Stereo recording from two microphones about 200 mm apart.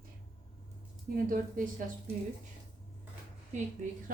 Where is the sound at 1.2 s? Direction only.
40° right (ahead or behind).